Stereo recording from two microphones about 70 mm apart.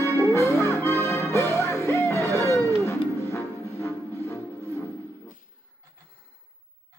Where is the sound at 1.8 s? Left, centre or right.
Left.